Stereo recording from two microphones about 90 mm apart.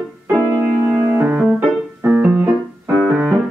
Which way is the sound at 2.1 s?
25° right (ahead or behind).